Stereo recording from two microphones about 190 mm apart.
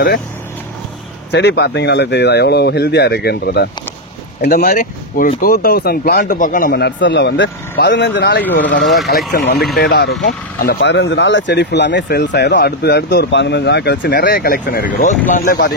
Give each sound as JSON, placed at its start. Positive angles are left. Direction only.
{"t": 1.3, "sound": "speech", "side_deg": 60}